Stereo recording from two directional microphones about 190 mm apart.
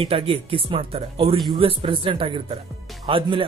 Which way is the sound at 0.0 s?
30° right (ahead or behind).